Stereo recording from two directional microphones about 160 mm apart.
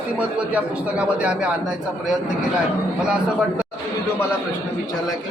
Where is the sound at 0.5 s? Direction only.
10° right (ahead or behind).